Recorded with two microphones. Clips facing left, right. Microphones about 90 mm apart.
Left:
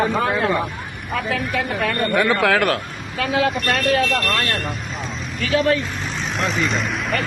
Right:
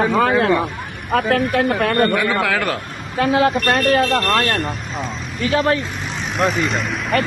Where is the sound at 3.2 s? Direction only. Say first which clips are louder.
Right 4 dB; 35° right (ahead or behind).